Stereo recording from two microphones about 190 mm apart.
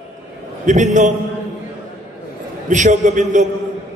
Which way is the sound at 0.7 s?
40° right (ahead or behind).